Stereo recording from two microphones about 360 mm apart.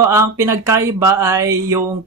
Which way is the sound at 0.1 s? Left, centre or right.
Centre.